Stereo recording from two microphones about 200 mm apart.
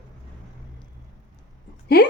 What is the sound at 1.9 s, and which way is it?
Speech, 50° left (ahead or behind).